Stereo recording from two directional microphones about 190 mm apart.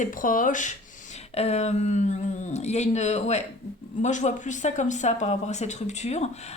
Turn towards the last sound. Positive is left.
turn(degrees=35)  # may be behind; listen again after turning